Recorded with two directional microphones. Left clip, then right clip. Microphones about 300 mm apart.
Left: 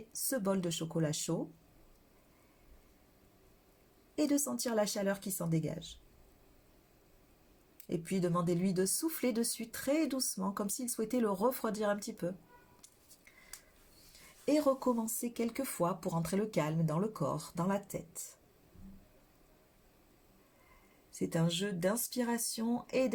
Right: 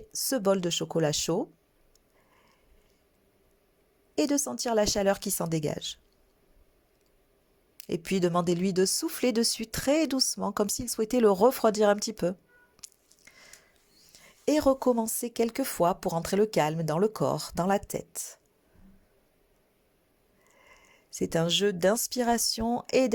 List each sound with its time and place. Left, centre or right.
0.1 s speech: right
4.1 s speech: right
7.8 s speech: right
14.4 s speech: right
21.1 s speech: right